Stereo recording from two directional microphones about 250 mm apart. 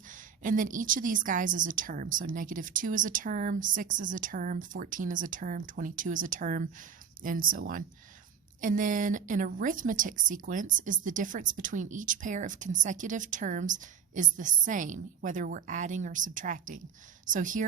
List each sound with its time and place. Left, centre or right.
0.1 s a woman's voice: right